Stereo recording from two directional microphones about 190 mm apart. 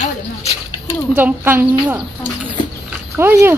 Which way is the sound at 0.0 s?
35° left (ahead or behind).